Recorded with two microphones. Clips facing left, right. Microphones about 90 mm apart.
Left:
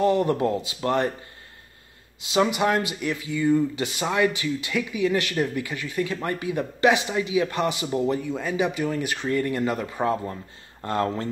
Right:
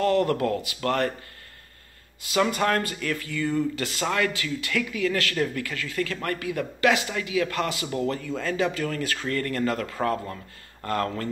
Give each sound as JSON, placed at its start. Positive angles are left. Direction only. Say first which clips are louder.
{"t": 0.0, "sound": "speech", "louder": "left 1 dB", "side_deg": 20}
{"t": 2.2, "sound": "speech", "louder": "left 2 dB", "side_deg": 20}